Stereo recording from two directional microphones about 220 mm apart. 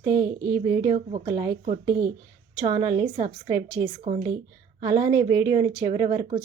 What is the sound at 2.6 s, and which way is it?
Speech, 20° right (ahead or behind).